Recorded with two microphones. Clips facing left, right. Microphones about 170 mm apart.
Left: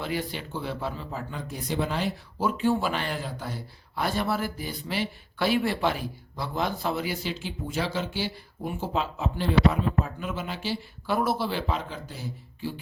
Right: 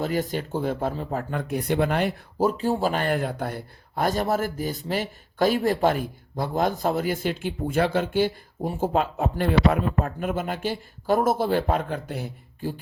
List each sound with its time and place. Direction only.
0.0 s speech: 45° right (ahead or behind)
2.4 s speech: 40° right (ahead or behind)